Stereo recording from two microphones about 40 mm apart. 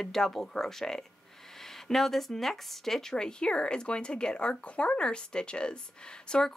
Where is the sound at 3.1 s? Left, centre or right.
Left.